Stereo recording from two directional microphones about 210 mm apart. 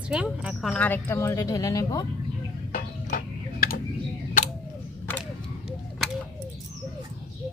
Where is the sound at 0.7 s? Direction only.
10° left (ahead or behind).